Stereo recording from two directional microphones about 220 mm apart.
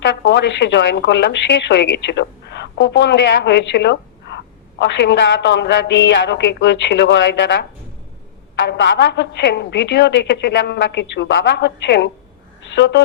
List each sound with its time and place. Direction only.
0.0 s a woman's voice: 55° left (ahead or behind)